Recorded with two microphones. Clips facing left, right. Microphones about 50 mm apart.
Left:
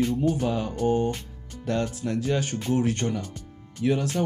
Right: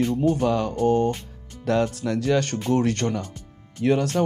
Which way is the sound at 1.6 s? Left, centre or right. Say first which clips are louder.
Right 5 dB; right.